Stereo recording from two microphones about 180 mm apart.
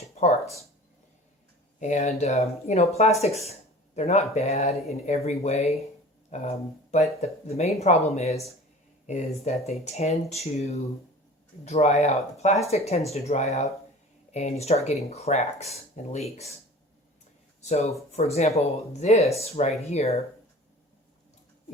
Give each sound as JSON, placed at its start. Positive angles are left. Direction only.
{"t": 0.2, "sound": "a sound", "side_deg": 40}
{"t": 1.8, "sound": "speech", "side_deg": 40}
{"t": 17.6, "sound": "speech", "side_deg": 40}